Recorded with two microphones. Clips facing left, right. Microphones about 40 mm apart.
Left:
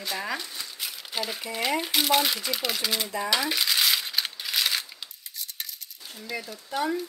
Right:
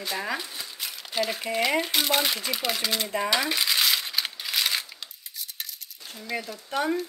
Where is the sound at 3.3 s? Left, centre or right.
Centre.